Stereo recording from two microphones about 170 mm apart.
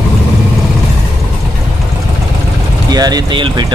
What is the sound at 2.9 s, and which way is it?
Speech, 25° right (ahead or behind).